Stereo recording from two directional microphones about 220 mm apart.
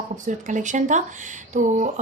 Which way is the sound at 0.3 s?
35° right (ahead or behind).